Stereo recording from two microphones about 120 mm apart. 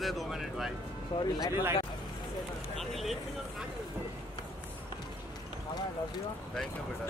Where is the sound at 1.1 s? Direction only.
45° left (ahead or behind).